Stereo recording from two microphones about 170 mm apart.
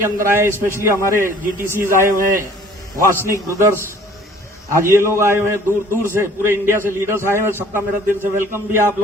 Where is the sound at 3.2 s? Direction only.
15° right (ahead or behind).